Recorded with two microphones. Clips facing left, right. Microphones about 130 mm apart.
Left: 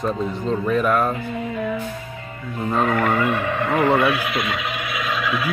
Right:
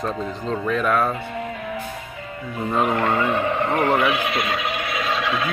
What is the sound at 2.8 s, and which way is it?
Speech, 25° right (ahead or behind).